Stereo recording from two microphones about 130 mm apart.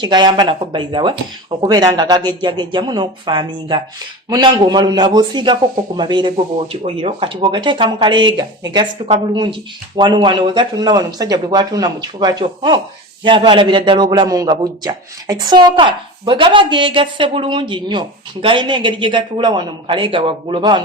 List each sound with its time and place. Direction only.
0.0 s a man's voice: 35° right (ahead or behind)
6.8 s a man's voice: 45° right (ahead or behind)